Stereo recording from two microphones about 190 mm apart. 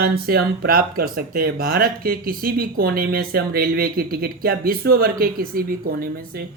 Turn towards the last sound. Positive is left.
turn(degrees=-50)  # may be behind; listen again after turning